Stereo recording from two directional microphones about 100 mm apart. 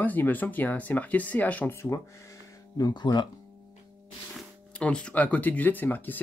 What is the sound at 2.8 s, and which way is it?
Speech, 45° left (ahead or behind).